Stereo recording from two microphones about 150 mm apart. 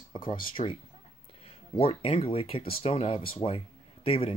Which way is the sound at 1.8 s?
40° left (ahead or behind).